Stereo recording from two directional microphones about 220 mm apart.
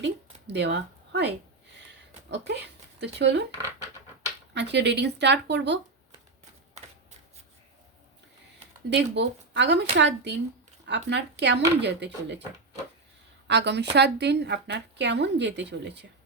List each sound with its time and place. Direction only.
0.4 s speech: 50° right (ahead or behind)
2.3 s speech: 50° right (ahead or behind)
4.5 s speech: 50° right (ahead or behind)
8.9 s speech: 50° right (ahead or behind)
13.5 s speech: 50° right (ahead or behind)